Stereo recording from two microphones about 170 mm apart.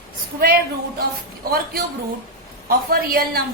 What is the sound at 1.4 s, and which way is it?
Speech, 60° right (ahead or behind).